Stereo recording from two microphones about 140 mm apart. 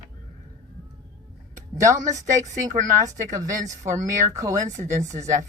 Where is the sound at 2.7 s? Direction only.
25° right (ahead or behind).